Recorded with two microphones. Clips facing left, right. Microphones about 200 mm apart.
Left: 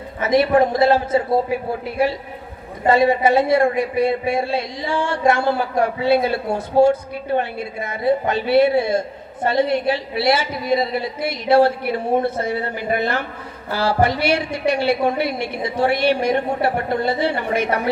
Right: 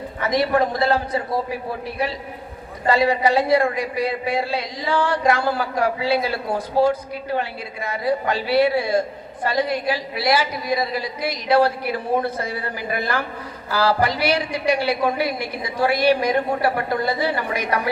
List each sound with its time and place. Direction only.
0.2 s a woman's voice: 25° left (ahead or behind)
2.8 s a woman's voice: 25° left (ahead or behind)